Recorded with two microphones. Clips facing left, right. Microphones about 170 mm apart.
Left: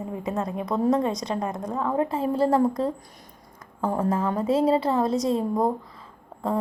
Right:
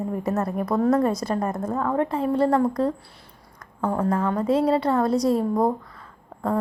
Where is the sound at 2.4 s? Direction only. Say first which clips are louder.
Even; 25° left (ahead or behind).